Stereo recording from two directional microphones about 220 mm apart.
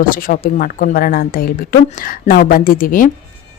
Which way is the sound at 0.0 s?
40° left (ahead or behind).